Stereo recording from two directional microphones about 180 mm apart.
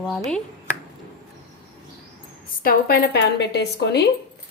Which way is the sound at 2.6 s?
55° left (ahead or behind).